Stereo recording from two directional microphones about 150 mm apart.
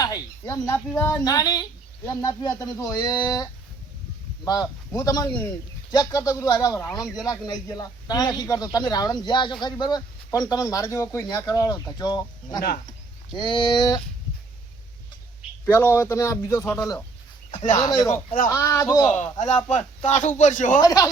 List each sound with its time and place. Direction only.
0.0 s speech: 20° left (ahead or behind)
15.6 s speech: 15° left (ahead or behind)
18.1 s speech: 65° left (ahead or behind)
18.4 s speech: 20° left (ahead or behind)
19.4 s speech: 45° left (ahead or behind)
20.8 s speech: 25° left (ahead or behind)